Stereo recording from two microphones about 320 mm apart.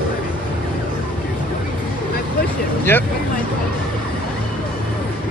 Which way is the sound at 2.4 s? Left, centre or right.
Left.